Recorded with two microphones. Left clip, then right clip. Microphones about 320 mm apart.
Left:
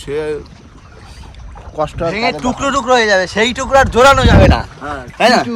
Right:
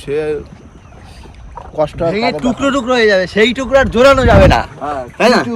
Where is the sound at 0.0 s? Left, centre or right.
Centre.